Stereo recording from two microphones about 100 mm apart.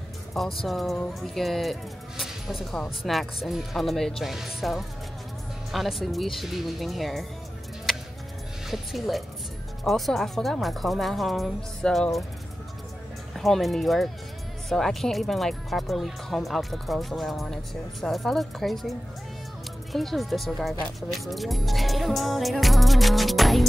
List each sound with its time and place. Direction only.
0.3 s speech: centre (ahead or behind)
8.6 s speech: centre (ahead or behind)
13.3 s speech: centre (ahead or behind)